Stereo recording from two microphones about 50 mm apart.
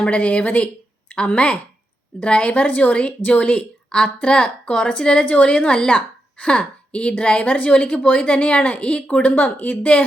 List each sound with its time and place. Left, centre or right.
0.0 s a woman's voice: left
9.3 s speech: left